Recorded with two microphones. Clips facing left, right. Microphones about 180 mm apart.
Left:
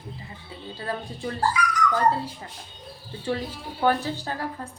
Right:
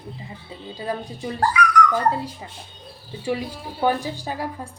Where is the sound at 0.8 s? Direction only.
15° right (ahead or behind).